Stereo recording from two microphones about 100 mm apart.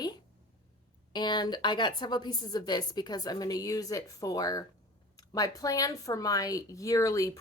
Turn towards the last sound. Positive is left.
turn(degrees=35)  # may be behind; listen again after turning